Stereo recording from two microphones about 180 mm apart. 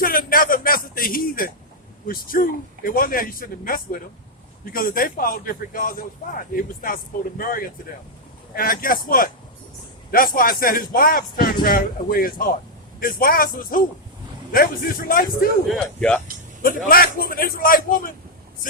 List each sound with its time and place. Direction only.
0.0 s a sound: 55° left (ahead or behind)
2.0 s a man's voice: 50° left (ahead or behind)
15.7 s speech: 5° left (ahead or behind)
16.6 s a man's voice: 55° left (ahead or behind)